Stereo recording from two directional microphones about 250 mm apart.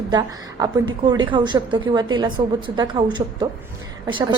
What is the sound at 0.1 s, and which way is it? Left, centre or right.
Speech, centre.